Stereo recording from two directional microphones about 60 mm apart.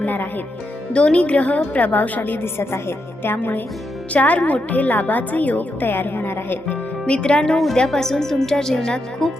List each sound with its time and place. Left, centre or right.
0.0 s a woman's voice: left
2.4 s speech: left
3.3 s a woman's voice: left
7.0 s speech: centre